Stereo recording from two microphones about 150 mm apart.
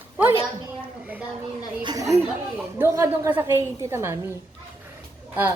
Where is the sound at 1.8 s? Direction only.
25° right (ahead or behind).